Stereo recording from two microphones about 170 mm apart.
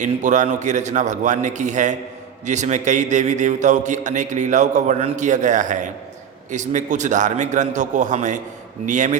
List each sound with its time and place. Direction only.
0.0 s a man's voice: 45° right (ahead or behind)